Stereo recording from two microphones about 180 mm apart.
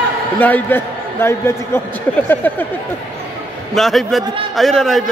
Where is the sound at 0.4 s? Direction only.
10° left (ahead or behind).